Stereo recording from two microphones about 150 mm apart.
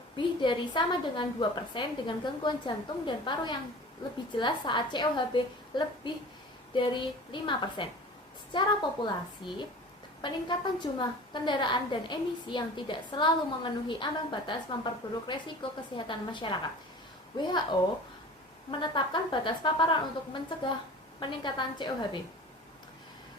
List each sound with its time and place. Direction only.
0.2 s a woman's voice: 30° left (ahead or behind)